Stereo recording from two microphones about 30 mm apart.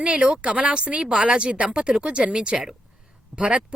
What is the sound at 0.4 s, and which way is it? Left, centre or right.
A woman's voice, right.